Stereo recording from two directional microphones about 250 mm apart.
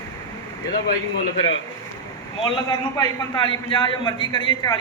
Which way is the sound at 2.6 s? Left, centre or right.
Centre.